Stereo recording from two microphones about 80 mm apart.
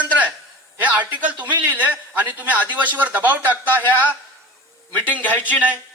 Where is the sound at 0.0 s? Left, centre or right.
Centre.